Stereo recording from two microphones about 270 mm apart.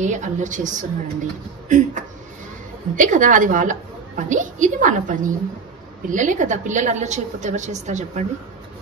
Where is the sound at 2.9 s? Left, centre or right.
Right.